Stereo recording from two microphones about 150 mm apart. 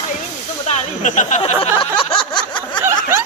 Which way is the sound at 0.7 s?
55° left (ahead or behind).